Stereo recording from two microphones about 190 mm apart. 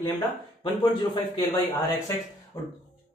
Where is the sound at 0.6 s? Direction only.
25° left (ahead or behind).